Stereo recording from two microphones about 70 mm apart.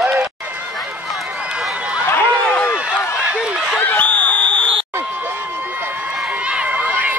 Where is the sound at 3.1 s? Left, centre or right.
Centre.